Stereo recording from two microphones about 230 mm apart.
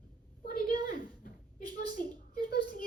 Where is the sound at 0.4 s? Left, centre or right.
Left.